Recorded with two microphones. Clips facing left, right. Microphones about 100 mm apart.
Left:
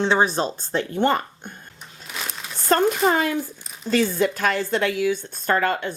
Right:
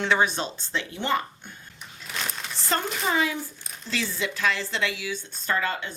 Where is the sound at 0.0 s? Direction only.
30° left (ahead or behind); by 1.2 s 50° left (ahead or behind).